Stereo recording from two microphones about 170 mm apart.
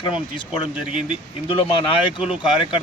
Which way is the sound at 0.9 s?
50° right (ahead or behind).